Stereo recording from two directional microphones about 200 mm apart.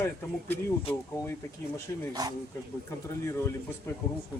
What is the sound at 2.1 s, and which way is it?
Speech, 20° right (ahead or behind).